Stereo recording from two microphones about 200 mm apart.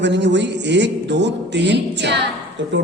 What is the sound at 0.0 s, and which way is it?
A woman's voice, 60° right (ahead or behind).